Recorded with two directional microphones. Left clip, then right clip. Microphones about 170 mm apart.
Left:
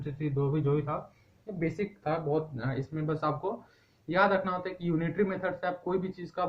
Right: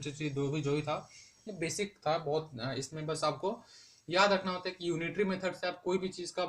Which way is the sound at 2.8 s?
45° right (ahead or behind).